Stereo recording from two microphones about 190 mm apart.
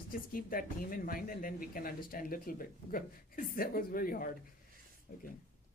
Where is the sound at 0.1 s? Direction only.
50° left (ahead or behind).